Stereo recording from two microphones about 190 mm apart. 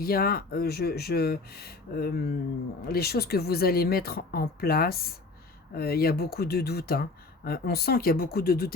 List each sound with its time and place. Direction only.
0.0 s speech: 50° left (ahead or behind)